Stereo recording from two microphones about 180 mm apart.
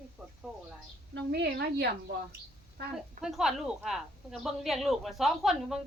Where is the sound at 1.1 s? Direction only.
65° right (ahead or behind).